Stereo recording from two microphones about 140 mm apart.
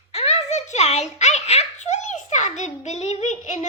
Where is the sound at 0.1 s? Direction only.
50° left (ahead or behind).